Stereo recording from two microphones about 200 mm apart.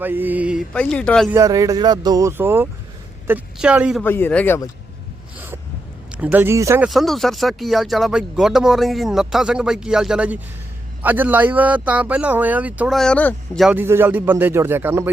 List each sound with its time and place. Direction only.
0.0 s speech: 10° right (ahead or behind)
0.7 s speech: 5° left (ahead or behind)
1.3 s speech: 15° right (ahead or behind)
4.0 s speech: 10° left (ahead or behind)
6.1 s speech: 10° right (ahead or behind)
6.8 s speech: centre (ahead or behind)
13.7 s speech: 10° right (ahead or behind)